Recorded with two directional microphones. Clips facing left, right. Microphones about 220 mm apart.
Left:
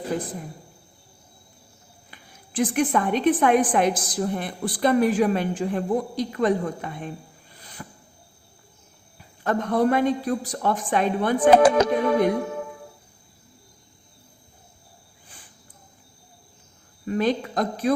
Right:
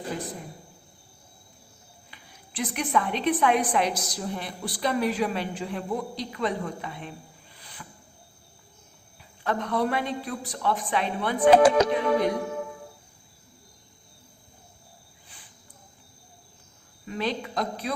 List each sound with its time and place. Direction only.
2.0 s a woman's voice: 45° left (ahead or behind)
7.6 s music: 45° left (ahead or behind)
9.4 s a woman's voice: 45° left (ahead or behind)
17.1 s a woman's voice: 45° left (ahead or behind)